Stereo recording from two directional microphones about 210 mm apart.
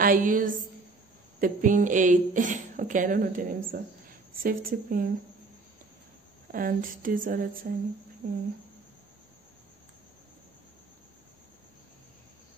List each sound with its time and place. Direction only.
0.0 s a woman's voice: 40° right (ahead or behind)
6.5 s a woman's voice: 40° right (ahead or behind)